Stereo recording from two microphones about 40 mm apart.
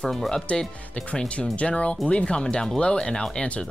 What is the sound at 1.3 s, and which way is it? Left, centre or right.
Speech, left.